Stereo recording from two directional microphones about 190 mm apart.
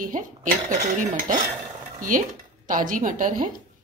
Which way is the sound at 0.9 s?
40° right (ahead or behind).